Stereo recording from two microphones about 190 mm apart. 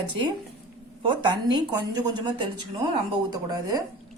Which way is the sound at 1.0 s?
25° right (ahead or behind).